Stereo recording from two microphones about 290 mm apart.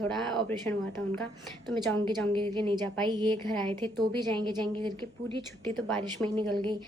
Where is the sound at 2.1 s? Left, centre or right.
Centre.